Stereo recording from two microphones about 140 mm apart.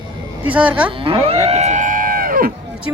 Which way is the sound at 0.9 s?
40° right (ahead or behind).